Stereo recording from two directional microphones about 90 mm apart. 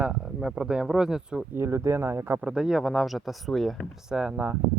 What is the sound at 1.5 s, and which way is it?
Speech, 30° right (ahead or behind).